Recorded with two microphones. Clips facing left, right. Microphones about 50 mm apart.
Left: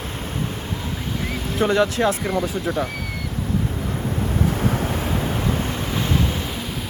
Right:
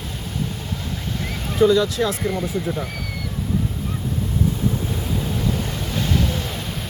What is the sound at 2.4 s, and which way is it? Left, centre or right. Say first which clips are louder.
Speech: left 1 dB; left.